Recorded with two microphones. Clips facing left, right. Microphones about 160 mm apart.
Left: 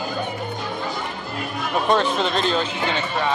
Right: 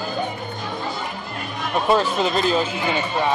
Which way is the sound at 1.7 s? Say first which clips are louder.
Right 1 dB; 5° right (ahead or behind).